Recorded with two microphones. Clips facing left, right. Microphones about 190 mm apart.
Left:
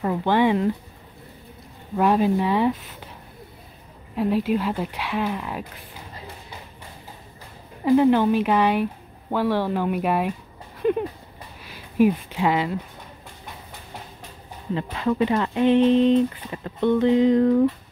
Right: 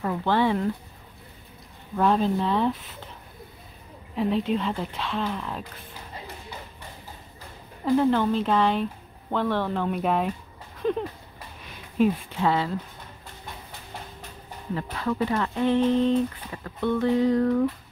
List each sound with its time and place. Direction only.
0.0 s speech: 20° left (ahead or behind)
2.0 s speech: 10° left (ahead or behind)
4.1 s speech: 5° left (ahead or behind)
7.8 s speech: 15° left (ahead or behind)
14.8 s speech: 20° left (ahead or behind)